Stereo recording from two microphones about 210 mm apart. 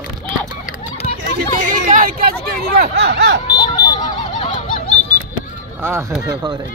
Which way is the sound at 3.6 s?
20° left (ahead or behind).